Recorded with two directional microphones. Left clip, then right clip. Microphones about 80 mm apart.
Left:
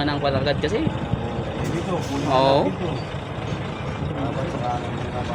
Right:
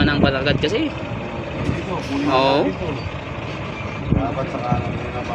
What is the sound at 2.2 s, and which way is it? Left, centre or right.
Speech, left.